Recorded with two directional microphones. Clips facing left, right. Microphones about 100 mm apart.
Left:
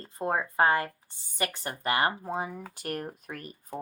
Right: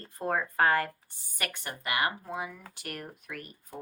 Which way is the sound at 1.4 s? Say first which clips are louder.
Left 5 dB; 35° left (ahead or behind).